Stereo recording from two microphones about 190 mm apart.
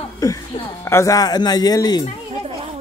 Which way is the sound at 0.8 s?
15° left (ahead or behind).